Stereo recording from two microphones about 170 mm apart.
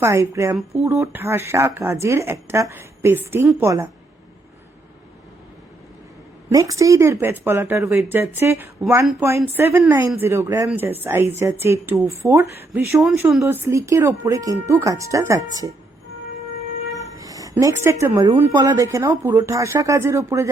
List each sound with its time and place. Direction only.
0.0 s speech: 15° right (ahead or behind)
6.5 s speech: 20° right (ahead or behind)
13.0 s speech: centre (ahead or behind)
13.4 s speech: 15° right (ahead or behind)
17.2 s speech: 20° right (ahead or behind)